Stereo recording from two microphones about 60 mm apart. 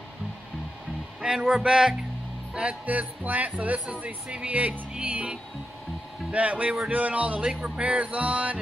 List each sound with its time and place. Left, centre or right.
1.2 s speech: centre
2.5 s music: centre